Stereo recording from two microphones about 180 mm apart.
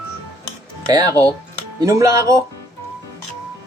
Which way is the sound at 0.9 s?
20° right (ahead or behind).